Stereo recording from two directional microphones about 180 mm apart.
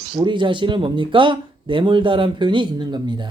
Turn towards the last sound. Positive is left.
turn(degrees=-25)  # may be behind; listen again after turning